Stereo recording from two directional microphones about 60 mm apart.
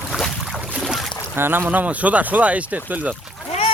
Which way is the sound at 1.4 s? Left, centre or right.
Right.